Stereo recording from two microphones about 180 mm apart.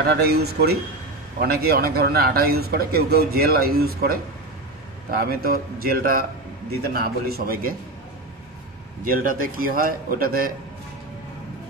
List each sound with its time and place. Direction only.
0.2 s a man's voice: 60° right (ahead or behind)
9.0 s a man's voice: 50° right (ahead or behind)